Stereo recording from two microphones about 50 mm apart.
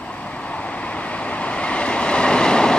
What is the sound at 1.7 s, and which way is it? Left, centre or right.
Train, left.